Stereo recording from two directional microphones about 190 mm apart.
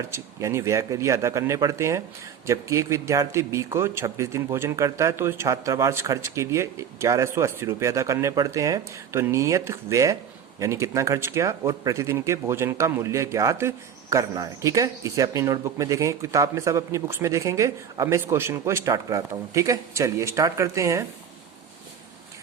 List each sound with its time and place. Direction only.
0.1 s speech: 15° right (ahead or behind)